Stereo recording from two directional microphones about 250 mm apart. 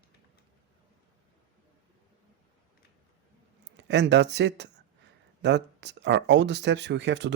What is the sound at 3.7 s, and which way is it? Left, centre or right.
Speech, right.